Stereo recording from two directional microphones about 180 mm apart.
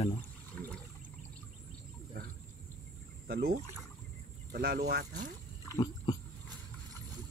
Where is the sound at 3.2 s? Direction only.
60° right (ahead or behind).